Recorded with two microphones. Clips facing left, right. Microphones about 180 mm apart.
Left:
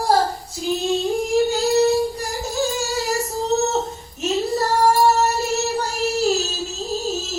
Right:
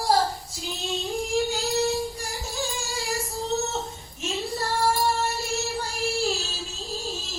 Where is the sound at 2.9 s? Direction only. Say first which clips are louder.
Left 7 dB; 40° left (ahead or behind).